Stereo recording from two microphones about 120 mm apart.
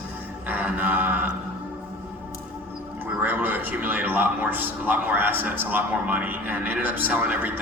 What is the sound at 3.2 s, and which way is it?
A man's voice, 15° right (ahead or behind).